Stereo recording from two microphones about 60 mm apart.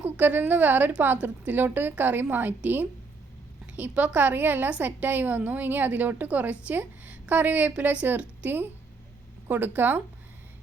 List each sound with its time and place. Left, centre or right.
0.0 s a woman's voice: right
3.8 s a woman's voice: right